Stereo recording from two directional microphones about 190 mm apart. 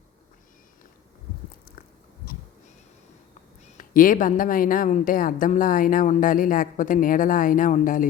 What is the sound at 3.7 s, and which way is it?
A woman's voice, 45° left (ahead or behind).